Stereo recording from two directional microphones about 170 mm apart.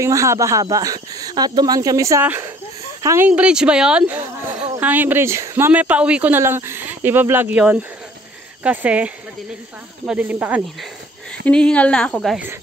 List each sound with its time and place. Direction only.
0.0 s speech: 15° right (ahead or behind)
11.4 s speech: 5° left (ahead or behind)